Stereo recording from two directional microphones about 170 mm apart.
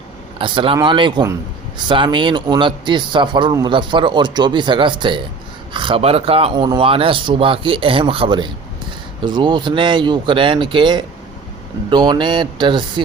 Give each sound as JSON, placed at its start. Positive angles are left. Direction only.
{"t": 0.3, "sound": "a man's voice", "side_deg": -30}